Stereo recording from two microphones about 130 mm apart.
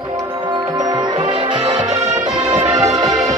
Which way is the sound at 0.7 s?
30° right (ahead or behind).